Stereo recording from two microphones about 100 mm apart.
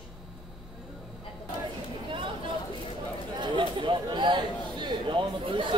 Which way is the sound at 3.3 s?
50° right (ahead or behind).